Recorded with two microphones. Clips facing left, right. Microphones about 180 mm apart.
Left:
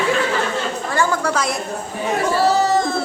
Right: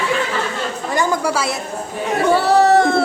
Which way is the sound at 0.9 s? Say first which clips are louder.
Right 2 dB; 15° right (ahead or behind).